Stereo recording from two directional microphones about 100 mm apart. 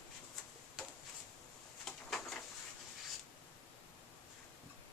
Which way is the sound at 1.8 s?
5° left (ahead or behind).